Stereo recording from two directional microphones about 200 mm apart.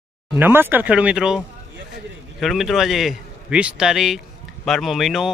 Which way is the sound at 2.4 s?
Centre (ahead or behind).